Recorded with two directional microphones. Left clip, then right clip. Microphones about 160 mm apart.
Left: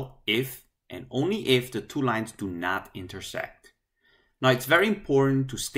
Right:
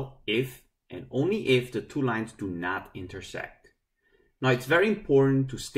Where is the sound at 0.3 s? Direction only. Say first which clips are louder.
Left 2 dB; 20° left (ahead or behind).